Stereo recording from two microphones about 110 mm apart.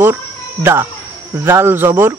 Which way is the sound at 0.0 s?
20° right (ahead or behind).